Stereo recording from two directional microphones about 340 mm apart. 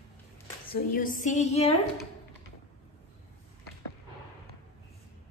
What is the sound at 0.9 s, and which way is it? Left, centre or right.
Speech, left.